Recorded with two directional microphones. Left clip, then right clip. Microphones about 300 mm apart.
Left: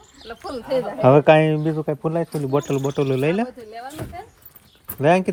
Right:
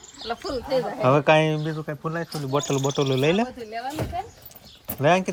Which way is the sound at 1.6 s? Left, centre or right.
Left.